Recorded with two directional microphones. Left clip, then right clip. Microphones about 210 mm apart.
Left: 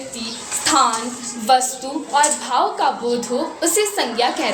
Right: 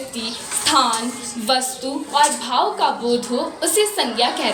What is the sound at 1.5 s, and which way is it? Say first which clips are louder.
A woman's voice: left 4 dB; 30° left (ahead or behind).